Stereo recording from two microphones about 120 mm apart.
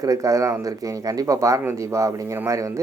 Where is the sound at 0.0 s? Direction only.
30° right (ahead or behind).